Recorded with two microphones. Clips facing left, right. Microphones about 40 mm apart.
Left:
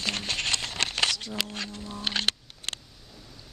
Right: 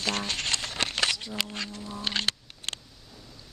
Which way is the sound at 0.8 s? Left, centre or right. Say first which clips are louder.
Even; centre.